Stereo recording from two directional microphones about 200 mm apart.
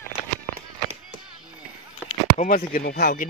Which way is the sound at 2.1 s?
40° left (ahead or behind).